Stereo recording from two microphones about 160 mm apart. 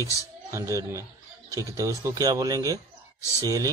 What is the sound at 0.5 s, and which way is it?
A man's voice, 20° right (ahead or behind).